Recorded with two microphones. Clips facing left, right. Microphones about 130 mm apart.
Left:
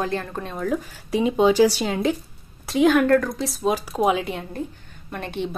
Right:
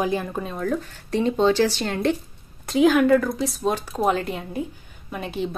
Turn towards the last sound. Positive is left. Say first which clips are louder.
# right 1 dB
turn(degrees=0)  # may be behind; listen again after turning